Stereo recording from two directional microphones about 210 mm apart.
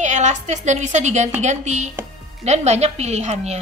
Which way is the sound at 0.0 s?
35° right (ahead or behind).